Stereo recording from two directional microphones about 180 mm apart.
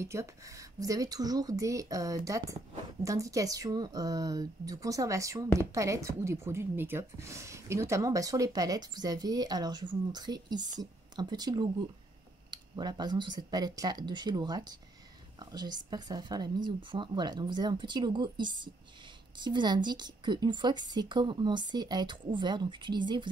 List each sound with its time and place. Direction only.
0.0 s a woman's voice: 15° right (ahead or behind)